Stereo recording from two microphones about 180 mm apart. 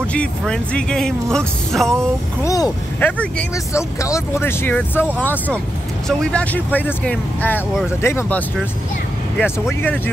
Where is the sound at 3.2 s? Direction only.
5° left (ahead or behind).